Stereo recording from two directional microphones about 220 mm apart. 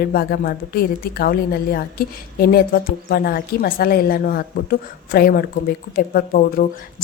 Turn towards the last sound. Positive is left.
turn(degrees=40)  # may be behind; listen again after turning